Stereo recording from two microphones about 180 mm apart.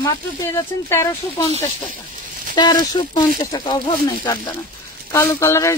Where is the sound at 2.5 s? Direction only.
25° left (ahead or behind).